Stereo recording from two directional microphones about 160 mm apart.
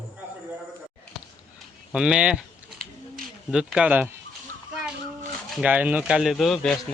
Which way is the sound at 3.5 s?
5° right (ahead or behind).